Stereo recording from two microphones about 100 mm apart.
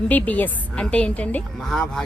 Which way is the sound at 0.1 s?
15° left (ahead or behind).